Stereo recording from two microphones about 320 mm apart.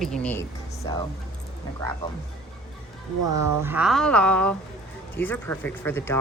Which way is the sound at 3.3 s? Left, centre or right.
Centre.